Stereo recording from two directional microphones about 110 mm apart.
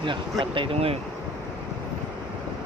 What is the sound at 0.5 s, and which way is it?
Speech, 55° right (ahead or behind).